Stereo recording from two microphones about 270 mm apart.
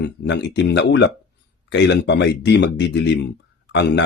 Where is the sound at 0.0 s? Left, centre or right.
Left.